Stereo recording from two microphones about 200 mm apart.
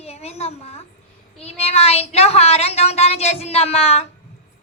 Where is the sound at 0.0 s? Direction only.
30° left (ahead or behind).